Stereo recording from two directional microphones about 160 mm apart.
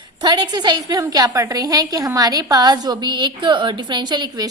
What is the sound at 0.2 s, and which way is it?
A woman's voice, 25° right (ahead or behind).